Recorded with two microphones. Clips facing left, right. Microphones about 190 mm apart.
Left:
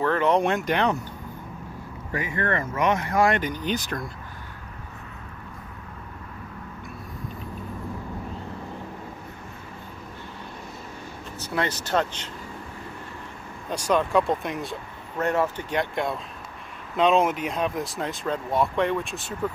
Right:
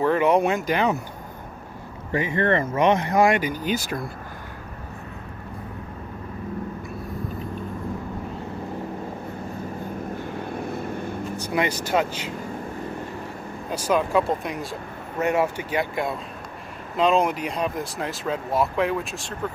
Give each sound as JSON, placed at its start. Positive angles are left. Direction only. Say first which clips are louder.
{"t": 0.0, "sound": "speech", "louder": "right 2 dB", "side_deg": -10}
{"t": 2.1, "sound": "speech", "louder": "right 5 dB", "side_deg": -25}
{"t": 3.3, "sound": "speech", "louder": "right 2 dB", "side_deg": -5}
{"t": 10.3, "sound": "vehicle", "louder": "right 10 dB", "side_deg": -55}
{"t": 11.3, "sound": "speech", "louder": "right 2 dB", "side_deg": -15}
{"t": 13.7, "sound": "speech", "louder": "right 1 dB", "side_deg": -5}